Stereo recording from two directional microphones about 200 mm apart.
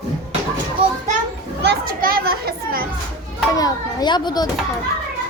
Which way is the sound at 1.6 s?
50° right (ahead or behind).